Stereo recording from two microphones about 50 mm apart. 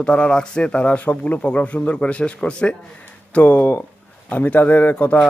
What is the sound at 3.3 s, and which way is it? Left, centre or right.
Speech, left.